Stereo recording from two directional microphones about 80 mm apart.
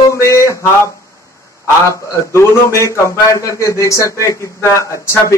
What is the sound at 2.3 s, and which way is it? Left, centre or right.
A man's voice, left.